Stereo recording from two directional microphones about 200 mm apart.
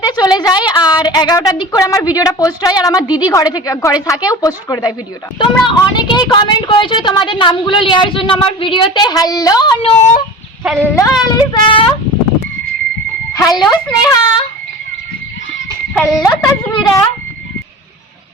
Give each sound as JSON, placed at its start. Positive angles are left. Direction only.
{"t": 0.0, "sound": "a woman's voice", "side_deg": 20}
{"t": 10.0, "sound": "a sound", "side_deg": 40}
{"t": 10.8, "sound": "a woman's voice", "side_deg": 15}
{"t": 13.3, "sound": "a woman's voice", "side_deg": 15}
{"t": 16.7, "sound": "a woman's voice", "side_deg": 20}